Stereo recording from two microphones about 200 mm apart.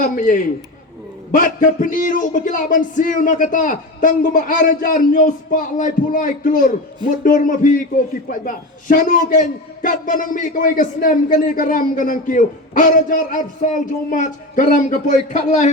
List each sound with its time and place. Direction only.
0.0 s a man's voice: 40° left (ahead or behind)